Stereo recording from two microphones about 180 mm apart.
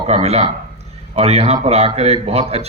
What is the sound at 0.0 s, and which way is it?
A man's voice, 35° right (ahead or behind).